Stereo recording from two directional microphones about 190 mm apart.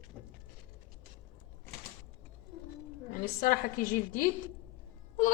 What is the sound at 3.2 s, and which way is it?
Speech, 50° left (ahead or behind).